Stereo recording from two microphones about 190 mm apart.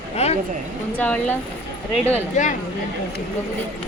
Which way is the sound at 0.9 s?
10° left (ahead or behind).